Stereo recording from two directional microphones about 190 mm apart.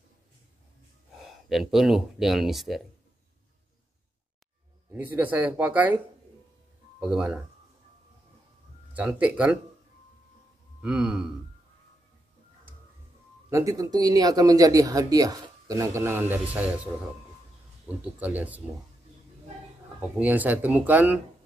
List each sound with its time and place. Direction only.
1.1 s speech: centre (ahead or behind)
4.9 s speech: 10° right (ahead or behind)
7.0 s a man's voice: 5° right (ahead or behind)
8.9 s speech: 5° right (ahead or behind)
10.8 s a man's voice: 5° right (ahead or behind)
13.5 s speech: 15° right (ahead or behind)
18.0 s speech: 10° right (ahead or behind)
20.2 s speech: 10° right (ahead or behind)